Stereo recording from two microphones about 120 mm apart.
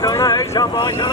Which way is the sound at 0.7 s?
40° left (ahead or behind).